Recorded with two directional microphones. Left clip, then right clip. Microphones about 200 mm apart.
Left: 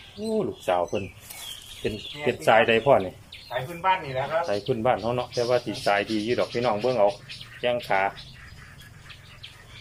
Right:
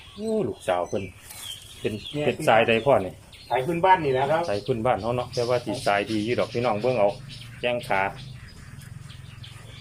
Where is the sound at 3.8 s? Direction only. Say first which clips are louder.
Right 5 dB; 60° right (ahead or behind).